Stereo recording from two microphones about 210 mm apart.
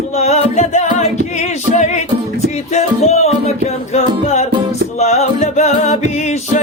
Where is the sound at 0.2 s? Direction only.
30° left (ahead or behind).